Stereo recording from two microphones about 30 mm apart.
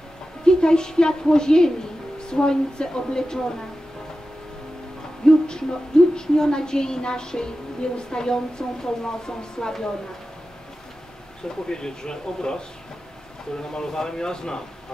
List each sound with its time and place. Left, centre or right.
0.5 s a woman's voice: left
5.2 s a woman's voice: left
11.4 s a woman's voice: left